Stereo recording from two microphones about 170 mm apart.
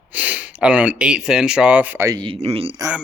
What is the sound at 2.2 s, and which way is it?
Speech, 35° right (ahead or behind).